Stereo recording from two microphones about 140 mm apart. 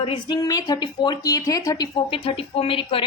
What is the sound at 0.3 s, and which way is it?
A woman's voice, 25° left (ahead or behind).